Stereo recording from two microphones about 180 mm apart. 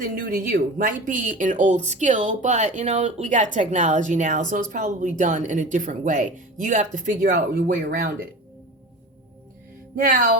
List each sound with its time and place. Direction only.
0.2 s speech: 50° right (ahead or behind)
9.9 s speech: 50° right (ahead or behind)